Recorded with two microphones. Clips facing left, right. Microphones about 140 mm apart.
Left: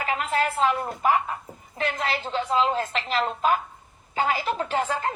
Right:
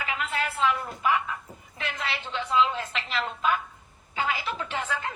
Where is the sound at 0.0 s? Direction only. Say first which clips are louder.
Left 5 dB; 40° left (ahead or behind).